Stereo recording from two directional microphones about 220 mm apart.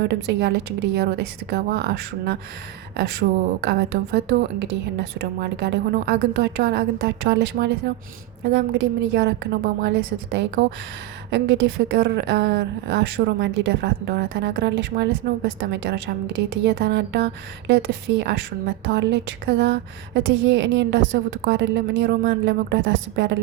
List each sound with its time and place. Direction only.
0.0 s a woman's voice: 50° right (ahead or behind)